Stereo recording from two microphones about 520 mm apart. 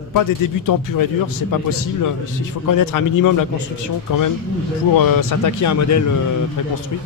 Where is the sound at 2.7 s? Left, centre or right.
Left.